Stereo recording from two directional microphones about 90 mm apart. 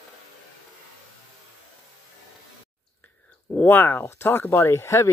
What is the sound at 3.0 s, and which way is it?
Speech, 20° left (ahead or behind).